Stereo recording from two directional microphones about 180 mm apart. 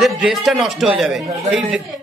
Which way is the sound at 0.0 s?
Centre (ahead or behind).